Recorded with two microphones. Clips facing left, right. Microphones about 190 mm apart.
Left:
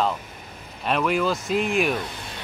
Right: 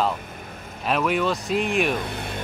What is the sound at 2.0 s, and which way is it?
Speech, 60° right (ahead or behind).